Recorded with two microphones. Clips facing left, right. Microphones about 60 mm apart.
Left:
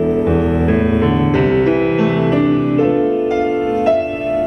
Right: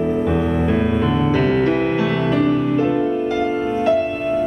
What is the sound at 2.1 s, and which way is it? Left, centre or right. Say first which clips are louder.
Music: left 3 dB; left.